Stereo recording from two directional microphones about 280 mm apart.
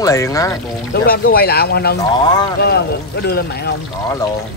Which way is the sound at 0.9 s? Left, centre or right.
Left.